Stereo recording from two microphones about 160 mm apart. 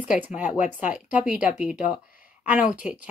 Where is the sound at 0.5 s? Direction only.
55° left (ahead or behind).